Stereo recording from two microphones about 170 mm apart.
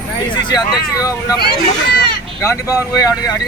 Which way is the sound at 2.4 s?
15° left (ahead or behind).